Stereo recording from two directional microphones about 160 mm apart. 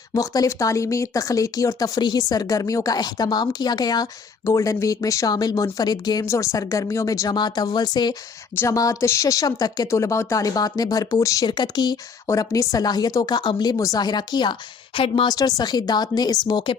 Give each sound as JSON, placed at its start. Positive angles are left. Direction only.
{"t": 0.1, "sound": "speech", "side_deg": 20}